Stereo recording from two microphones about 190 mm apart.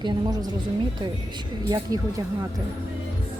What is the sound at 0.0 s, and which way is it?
Speech, 20° right (ahead or behind).